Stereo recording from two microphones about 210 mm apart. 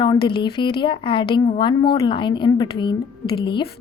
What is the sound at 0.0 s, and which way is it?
A woman's voice, 20° left (ahead or behind).